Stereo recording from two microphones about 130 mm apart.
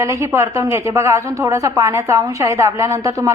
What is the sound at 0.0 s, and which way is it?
Speech, 25° right (ahead or behind).